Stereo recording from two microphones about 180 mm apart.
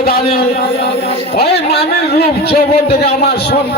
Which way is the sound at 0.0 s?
60° left (ahead or behind).